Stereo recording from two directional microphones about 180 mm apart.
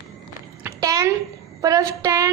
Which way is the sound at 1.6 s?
20° right (ahead or behind).